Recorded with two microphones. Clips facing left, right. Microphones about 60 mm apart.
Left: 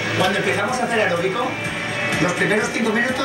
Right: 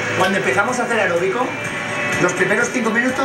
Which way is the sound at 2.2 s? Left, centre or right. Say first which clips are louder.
Right 3 dB; centre.